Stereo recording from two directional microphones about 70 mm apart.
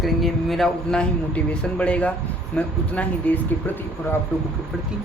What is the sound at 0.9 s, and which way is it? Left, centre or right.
Speech, centre.